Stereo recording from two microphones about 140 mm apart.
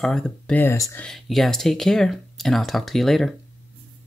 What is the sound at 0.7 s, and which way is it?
Speech, 20° left (ahead or behind).